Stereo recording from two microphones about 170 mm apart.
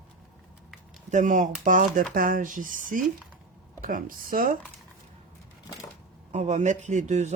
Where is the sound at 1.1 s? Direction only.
50° right (ahead or behind).